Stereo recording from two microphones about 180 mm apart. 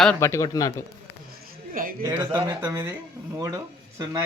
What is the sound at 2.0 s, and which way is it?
Speech, 20° right (ahead or behind).